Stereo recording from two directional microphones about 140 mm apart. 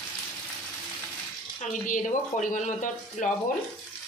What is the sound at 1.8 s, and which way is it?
Speech, 65° left (ahead or behind).